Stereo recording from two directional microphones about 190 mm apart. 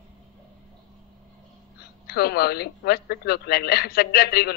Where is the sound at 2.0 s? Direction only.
55° left (ahead or behind).